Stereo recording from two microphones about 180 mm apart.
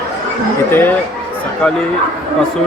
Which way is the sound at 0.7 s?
10° left (ahead or behind).